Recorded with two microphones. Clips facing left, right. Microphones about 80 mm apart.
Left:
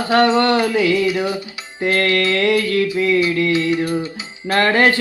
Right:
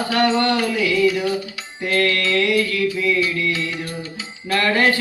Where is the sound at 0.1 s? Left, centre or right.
Left.